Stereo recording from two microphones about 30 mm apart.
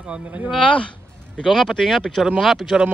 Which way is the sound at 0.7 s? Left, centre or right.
Left.